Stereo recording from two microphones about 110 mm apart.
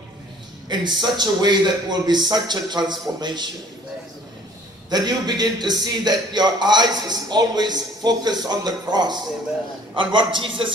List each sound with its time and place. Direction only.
0.7 s a man's voice: 40° right (ahead or behind)
4.8 s a man's voice: 40° right (ahead or behind)